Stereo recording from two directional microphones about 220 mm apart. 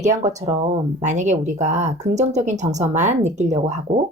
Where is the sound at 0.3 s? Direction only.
15° right (ahead or behind).